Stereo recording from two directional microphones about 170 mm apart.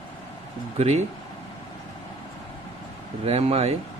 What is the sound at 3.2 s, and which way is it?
Speech, 35° right (ahead or behind).